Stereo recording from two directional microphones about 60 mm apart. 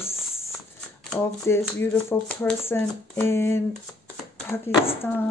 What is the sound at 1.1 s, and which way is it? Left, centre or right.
Speech, left.